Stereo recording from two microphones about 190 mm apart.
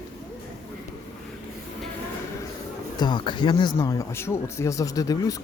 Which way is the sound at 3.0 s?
25° left (ahead or behind).